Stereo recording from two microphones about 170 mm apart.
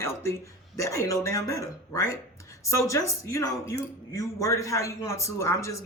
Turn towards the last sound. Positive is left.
turn(degrees=15)  # may be behind; listen again after turning